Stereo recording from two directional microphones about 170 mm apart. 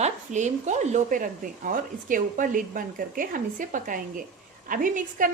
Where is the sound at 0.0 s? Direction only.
45° right (ahead or behind).